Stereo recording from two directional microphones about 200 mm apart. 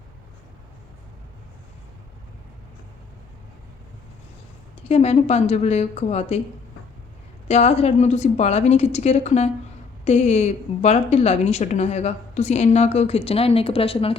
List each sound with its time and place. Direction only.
4.9 s a woman's voice: 30° left (ahead or behind)
7.4 s a woman's voice: 35° left (ahead or behind)